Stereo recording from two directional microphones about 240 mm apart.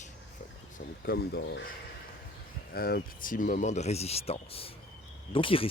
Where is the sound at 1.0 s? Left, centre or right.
Left.